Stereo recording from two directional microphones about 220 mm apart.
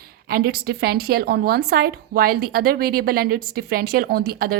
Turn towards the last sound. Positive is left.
turn(degrees=-45)  # may be behind; listen again after turning